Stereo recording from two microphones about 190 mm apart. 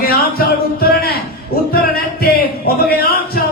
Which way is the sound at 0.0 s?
55° left (ahead or behind).